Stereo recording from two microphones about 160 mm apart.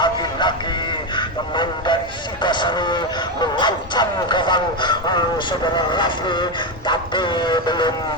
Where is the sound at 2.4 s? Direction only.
30° left (ahead or behind).